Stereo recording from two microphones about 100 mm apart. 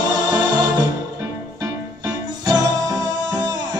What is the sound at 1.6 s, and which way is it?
Music, 40° right (ahead or behind).